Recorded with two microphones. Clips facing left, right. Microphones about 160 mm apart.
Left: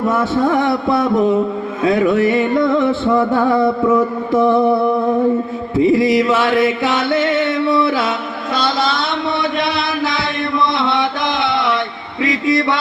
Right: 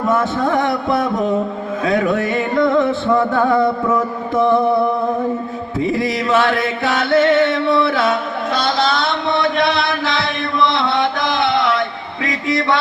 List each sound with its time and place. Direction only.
0.2 s music: 25° left (ahead or behind)
5.7 s music: 25° left (ahead or behind)
8.5 s a sound: 25° left (ahead or behind)
10.0 s chant: 20° left (ahead or behind)
10.8 s mantra: 25° left (ahead or behind)
12.2 s a sound: 25° left (ahead or behind)